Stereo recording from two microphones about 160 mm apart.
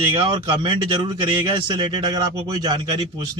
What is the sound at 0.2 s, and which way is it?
Speech, 25° right (ahead or behind).